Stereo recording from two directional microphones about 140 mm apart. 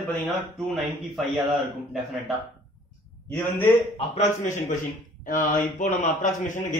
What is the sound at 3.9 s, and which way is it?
Speech, 55° left (ahead or behind).